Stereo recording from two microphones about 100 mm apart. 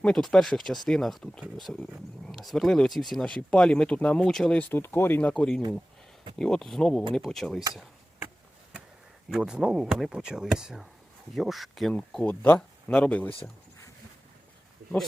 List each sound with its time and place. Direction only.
0.0 s speech: 10° left (ahead or behind)
4.7 s speech: 20° left (ahead or behind); by 7.6 s 5° left (ahead or behind)
9.3 s speech: 5° right (ahead or behind); by 13.3 s 15° left (ahead or behind)